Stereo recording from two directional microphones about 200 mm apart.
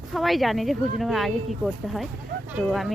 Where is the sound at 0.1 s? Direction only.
Centre (ahead or behind).